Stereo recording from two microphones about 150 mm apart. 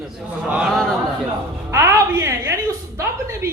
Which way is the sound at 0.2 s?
5° right (ahead or behind).